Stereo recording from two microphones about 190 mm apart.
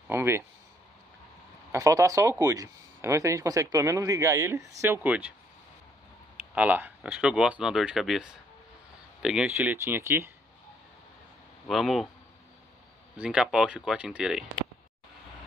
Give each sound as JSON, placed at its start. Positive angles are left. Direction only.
{"t": 0.1, "sound": "speech", "side_deg": -15}
{"t": 1.7, "sound": "speech", "side_deg": -15}
{"t": 6.3, "sound": "speech", "side_deg": -10}
{"t": 11.6, "sound": "speech", "side_deg": 0}
{"t": 13.2, "sound": "speech", "side_deg": -5}